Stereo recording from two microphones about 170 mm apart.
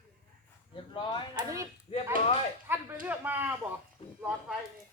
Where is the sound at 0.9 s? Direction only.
25° left (ahead or behind).